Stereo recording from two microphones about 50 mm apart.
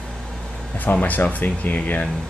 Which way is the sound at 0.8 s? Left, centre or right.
Left.